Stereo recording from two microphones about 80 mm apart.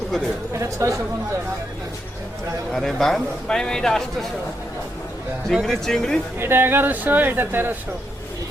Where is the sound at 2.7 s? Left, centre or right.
Centre.